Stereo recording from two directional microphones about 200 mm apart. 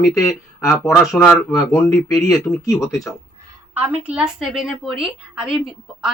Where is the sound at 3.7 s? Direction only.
10° right (ahead or behind).